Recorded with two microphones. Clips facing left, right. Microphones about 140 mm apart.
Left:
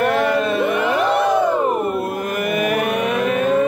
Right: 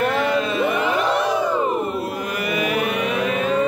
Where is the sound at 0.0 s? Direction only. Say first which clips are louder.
Left 3 dB; 60° left (ahead or behind).